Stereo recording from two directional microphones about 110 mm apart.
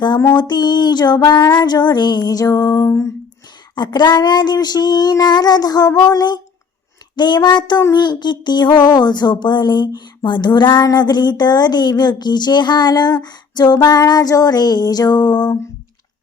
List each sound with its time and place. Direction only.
0.3 s child singing: 40° left (ahead or behind)
3.8 s child singing: 40° left (ahead or behind)